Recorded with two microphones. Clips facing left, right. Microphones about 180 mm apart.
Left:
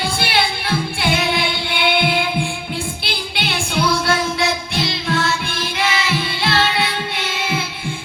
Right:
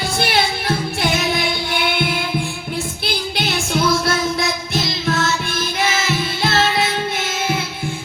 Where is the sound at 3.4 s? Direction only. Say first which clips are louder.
Right 1 dB; 40° right (ahead or behind).